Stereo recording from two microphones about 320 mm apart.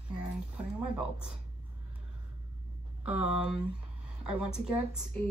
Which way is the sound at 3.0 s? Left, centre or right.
Centre.